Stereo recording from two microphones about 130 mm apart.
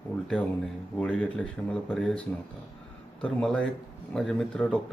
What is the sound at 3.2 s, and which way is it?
A man's voice, 5° left (ahead or behind).